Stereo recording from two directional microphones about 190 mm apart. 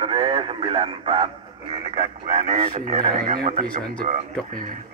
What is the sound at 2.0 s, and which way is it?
Speech, 40° right (ahead or behind).